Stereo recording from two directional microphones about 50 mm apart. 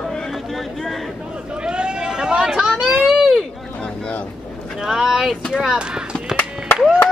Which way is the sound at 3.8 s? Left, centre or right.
Centre.